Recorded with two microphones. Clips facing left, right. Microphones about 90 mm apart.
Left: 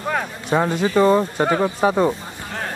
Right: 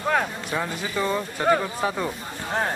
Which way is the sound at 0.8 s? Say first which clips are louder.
Left 12 dB; 35° left (ahead or behind).